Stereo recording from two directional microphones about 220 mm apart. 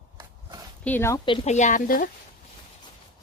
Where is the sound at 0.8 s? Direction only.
10° left (ahead or behind); by 2.1 s 40° left (ahead or behind).